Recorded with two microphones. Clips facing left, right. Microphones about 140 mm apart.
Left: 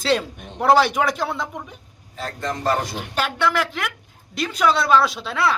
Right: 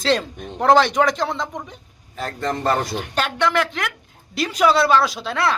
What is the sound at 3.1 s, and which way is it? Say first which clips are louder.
Speech: right 1 dB; 10° left (ahead or behind).